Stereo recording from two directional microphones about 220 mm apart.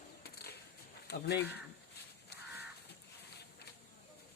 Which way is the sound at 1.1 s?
50° left (ahead or behind).